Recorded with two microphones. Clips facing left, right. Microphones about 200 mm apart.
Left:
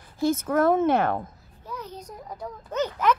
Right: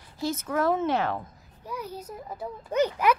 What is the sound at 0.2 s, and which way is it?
A woman's voice, 50° left (ahead or behind).